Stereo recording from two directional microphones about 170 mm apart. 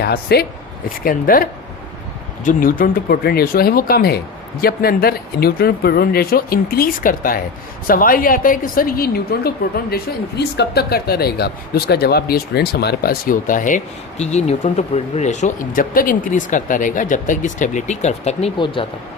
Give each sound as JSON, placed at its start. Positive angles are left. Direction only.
{"t": 0.0, "sound": "speech", "side_deg": 70}
{"t": 1.0, "sound": "a woman's voice", "side_deg": 55}